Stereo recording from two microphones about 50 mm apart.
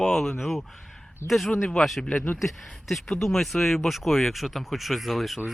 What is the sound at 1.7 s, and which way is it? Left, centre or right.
Speech, centre.